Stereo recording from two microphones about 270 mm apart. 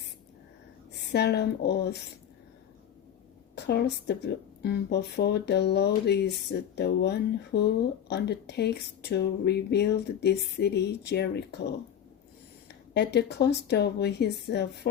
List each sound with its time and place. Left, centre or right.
1.1 s speech: left
3.5 s a woman's voice: left
12.9 s speech: left